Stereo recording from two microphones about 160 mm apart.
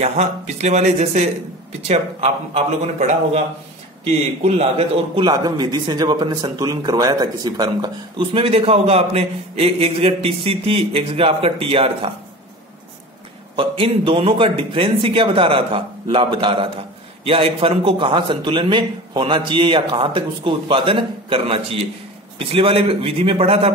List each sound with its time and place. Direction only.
0.0 s a man's voice: 40° right (ahead or behind)
13.6 s a man's voice: 35° right (ahead or behind)